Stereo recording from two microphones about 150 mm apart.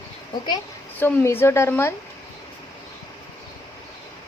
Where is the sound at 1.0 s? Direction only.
15° left (ahead or behind).